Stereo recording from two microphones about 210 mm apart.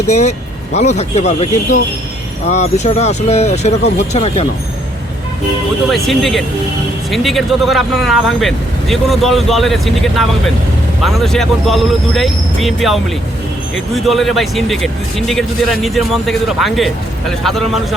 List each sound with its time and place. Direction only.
0.1 s speech: 30° left (ahead or behind)
6.1 s speech: centre (ahead or behind)